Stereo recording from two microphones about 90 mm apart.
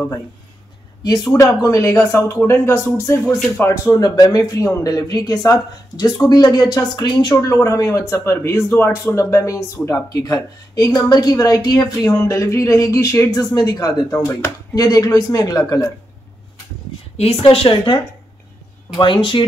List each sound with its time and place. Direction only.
1.3 s speech: 35° left (ahead or behind)
3.9 s speech: 45° left (ahead or behind)
7.3 s speech: 35° left (ahead or behind)
9.8 s speech: 25° left (ahead or behind)
10.2 s speech: 40° left (ahead or behind)
12.2 s speech: 35° left (ahead or behind)
17.4 s speech: 90° left; by 19.4 s 65° left (ahead or behind)